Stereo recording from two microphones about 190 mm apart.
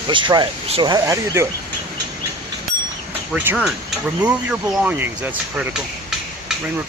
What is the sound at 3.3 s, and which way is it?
Speech, 10° right (ahead or behind).